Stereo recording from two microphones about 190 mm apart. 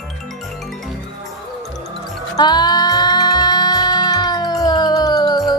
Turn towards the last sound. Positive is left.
turn(degrees=20)  # may be behind; listen again after turning